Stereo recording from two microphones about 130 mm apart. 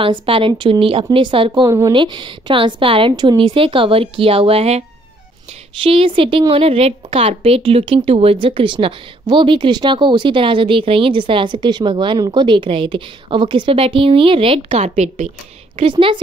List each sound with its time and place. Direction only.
0.0 s a woman's voice: 40° right (ahead or behind); by 15.3 s 60° right (ahead or behind)
15.7 s speech: 45° right (ahead or behind)